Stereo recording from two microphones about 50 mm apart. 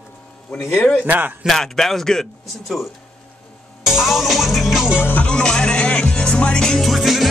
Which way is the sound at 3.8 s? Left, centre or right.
Centre.